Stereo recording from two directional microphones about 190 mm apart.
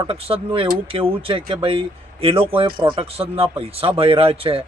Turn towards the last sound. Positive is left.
turn(degrees=-30)  # may be behind; listen again after turning